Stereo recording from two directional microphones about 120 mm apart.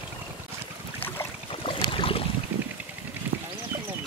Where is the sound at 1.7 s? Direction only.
50° left (ahead or behind).